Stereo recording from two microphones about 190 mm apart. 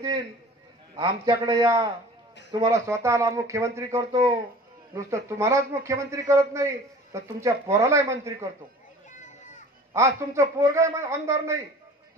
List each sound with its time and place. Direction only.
0.9 s a man's voice: 20° right (ahead or behind)
9.9 s a man's voice: 15° right (ahead or behind)